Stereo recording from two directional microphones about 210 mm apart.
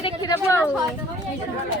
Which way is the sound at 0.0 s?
20° left (ahead or behind).